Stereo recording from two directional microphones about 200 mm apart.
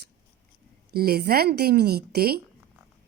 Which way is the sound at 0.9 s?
50° right (ahead or behind).